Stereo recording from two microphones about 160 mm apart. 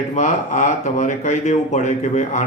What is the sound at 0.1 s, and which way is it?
Speech, 45° left (ahead or behind).